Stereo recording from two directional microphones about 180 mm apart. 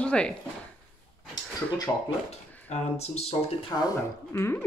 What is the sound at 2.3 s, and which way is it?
Speech, 35° left (ahead or behind).